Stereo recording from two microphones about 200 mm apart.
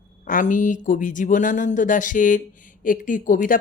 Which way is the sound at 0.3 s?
40° left (ahead or behind).